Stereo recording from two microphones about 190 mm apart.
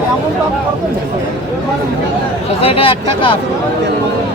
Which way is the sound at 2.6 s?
30° left (ahead or behind).